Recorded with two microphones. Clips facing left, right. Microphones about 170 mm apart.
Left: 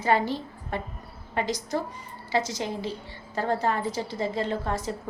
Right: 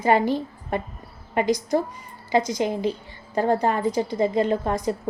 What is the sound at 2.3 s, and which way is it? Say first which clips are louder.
A woman's voice: right 6 dB; 15° right (ahead or behind).